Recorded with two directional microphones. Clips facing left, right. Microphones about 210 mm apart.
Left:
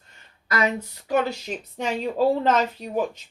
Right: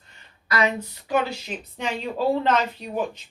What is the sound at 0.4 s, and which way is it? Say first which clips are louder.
Speech: even; 45° left (ahead or behind).